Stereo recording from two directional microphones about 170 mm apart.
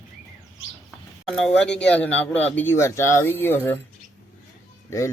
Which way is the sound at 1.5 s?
5° left (ahead or behind).